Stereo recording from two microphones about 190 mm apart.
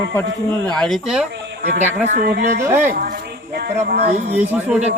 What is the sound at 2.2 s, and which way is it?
Speech, 60° right (ahead or behind).